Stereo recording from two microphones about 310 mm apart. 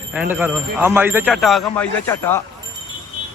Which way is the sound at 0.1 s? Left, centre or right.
Centre.